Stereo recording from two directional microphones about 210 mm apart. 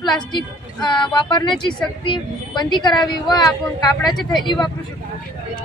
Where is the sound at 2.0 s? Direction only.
20° left (ahead or behind).